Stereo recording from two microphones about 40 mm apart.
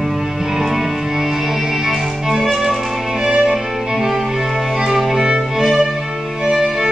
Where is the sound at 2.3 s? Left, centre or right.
Centre.